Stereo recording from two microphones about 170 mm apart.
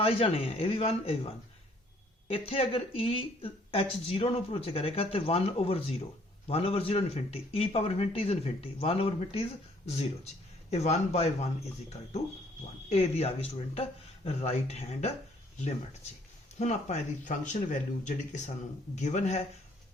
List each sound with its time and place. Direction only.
0.0 s speech: 35° left (ahead or behind)
10.7 s speech: 40° left (ahead or behind)
16.6 s speech: 45° left (ahead or behind)